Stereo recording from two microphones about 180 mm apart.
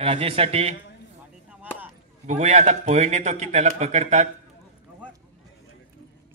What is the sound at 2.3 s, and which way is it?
A man's voice, 40° right (ahead or behind).